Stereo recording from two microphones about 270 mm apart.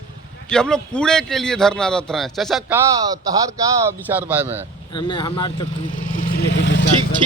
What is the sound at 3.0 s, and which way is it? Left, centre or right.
Speech, centre.